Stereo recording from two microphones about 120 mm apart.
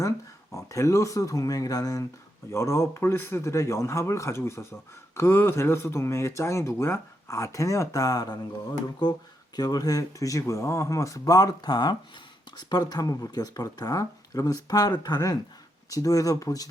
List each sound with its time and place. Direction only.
0.5 s speech: 25° left (ahead or behind)
9.6 s speech: 30° left (ahead or behind)